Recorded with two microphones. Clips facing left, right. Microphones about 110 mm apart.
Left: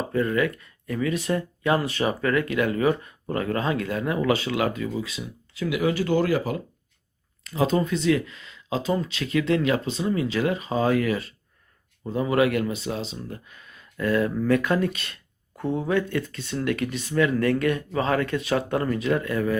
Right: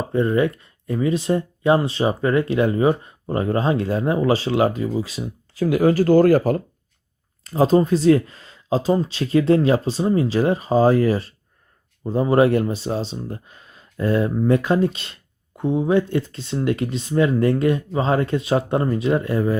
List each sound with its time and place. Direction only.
0.1 s speech: 25° right (ahead or behind); by 6.6 s 45° right (ahead or behind)
7.4 s speech: 35° right (ahead or behind)